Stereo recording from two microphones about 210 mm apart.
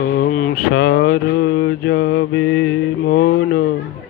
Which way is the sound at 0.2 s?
40° left (ahead or behind).